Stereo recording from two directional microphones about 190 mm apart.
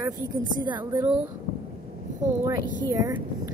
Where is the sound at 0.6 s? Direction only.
25° right (ahead or behind).